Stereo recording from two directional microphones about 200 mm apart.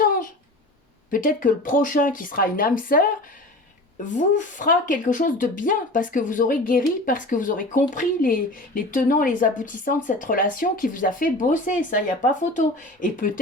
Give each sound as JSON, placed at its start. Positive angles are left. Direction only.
{"t": 0.0, "sound": "a sound", "side_deg": 45}
{"t": 1.1, "sound": "speech", "side_deg": 40}
{"t": 4.1, "sound": "speech", "side_deg": 40}